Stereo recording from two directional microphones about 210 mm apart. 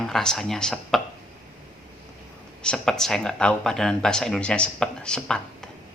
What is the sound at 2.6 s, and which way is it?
Speech, 5° left (ahead or behind).